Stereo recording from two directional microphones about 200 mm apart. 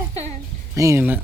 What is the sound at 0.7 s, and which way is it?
Speech, 15° right (ahead or behind).